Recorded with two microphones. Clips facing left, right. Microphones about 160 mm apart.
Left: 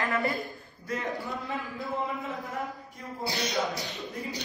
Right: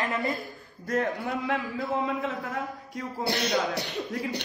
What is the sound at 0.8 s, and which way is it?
A man's voice, 55° right (ahead or behind).